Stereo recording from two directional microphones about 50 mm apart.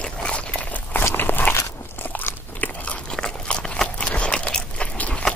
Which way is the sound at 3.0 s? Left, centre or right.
Centre.